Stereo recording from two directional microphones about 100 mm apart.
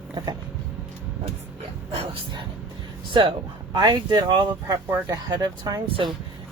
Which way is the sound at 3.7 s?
50° right (ahead or behind).